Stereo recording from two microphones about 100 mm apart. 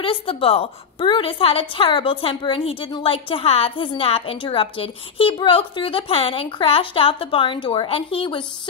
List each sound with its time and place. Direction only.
0.0 s a woman's voice: 65° left (ahead or behind)
1.0 s a woman's voice: 60° left (ahead or behind)